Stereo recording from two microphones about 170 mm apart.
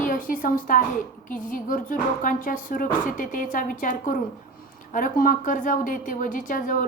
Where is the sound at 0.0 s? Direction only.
50° left (ahead or behind).